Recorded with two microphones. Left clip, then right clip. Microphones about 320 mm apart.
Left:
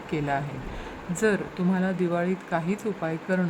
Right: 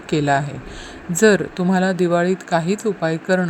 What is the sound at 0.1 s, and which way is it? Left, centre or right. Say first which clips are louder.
Speech: right 10 dB; centre.